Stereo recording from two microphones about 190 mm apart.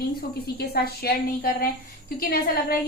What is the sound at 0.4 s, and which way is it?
A woman's voice, 55° left (ahead or behind).